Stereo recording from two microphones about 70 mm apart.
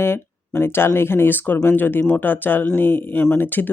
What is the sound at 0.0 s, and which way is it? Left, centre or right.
Speech, left.